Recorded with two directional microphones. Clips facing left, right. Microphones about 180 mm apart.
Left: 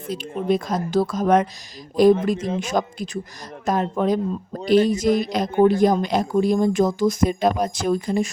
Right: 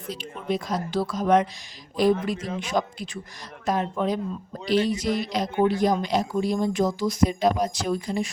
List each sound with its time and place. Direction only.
0.1 s a man's voice: 50° left (ahead or behind)